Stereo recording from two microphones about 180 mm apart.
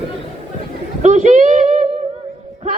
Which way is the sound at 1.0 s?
40° right (ahead or behind).